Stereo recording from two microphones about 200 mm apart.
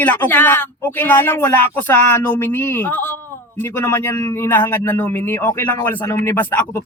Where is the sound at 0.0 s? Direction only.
10° left (ahead or behind).